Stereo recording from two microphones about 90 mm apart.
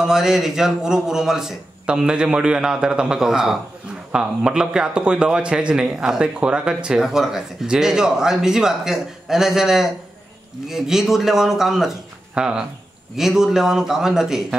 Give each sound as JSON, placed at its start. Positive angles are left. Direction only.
{"t": 0.0, "sound": "a man's voice", "side_deg": -5}